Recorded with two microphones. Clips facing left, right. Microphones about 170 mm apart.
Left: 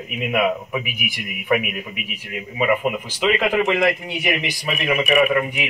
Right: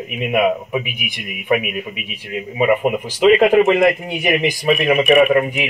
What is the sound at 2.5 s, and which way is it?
Speech, 30° right (ahead or behind).